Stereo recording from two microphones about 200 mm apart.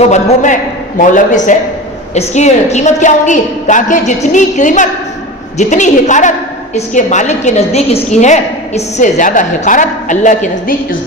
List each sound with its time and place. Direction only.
0.1 s a woman's voice: 40° left (ahead or behind)